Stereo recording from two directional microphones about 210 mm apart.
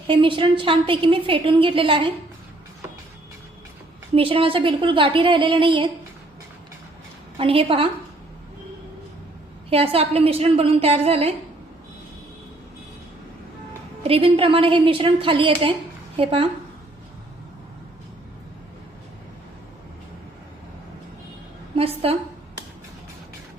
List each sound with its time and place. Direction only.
0.1 s a woman's voice: 25° right (ahead or behind)
4.1 s a woman's voice: 25° right (ahead or behind)
7.3 s a woman's voice: 25° right (ahead or behind)
9.6 s a woman's voice: 25° right (ahead or behind)
14.0 s a woman's voice: 25° right (ahead or behind)
21.8 s a woman's voice: 25° right (ahead or behind)